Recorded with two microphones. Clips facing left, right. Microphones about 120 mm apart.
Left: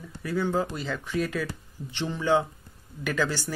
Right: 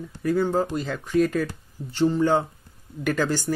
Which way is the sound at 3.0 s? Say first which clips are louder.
Right 4 dB; 50° right (ahead or behind).